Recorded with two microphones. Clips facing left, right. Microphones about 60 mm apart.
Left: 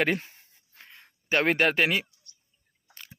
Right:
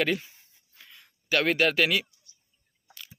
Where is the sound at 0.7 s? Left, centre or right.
Left.